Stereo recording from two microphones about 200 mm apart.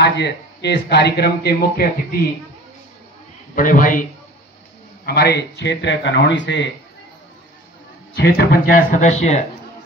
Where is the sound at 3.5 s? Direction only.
40° left (ahead or behind).